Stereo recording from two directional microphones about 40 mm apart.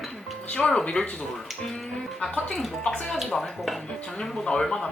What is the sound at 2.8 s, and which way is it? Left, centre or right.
Speech, centre.